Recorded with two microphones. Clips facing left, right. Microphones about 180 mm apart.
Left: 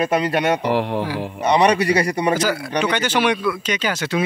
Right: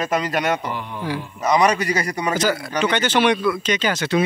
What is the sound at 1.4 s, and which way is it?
Speech, 30° left (ahead or behind).